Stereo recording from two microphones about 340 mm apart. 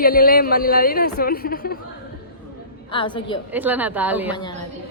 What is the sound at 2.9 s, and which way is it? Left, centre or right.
Speech, centre.